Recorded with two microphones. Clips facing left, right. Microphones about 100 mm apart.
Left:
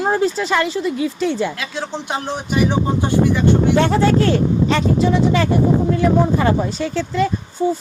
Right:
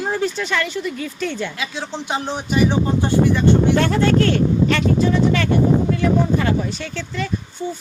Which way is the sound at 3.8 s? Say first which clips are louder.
Left 1 dB; 20° left (ahead or behind).